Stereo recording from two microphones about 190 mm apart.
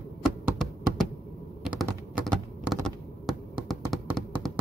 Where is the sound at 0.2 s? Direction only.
Centre (ahead or behind).